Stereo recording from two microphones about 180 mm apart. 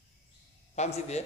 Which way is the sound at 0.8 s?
35° left (ahead or behind).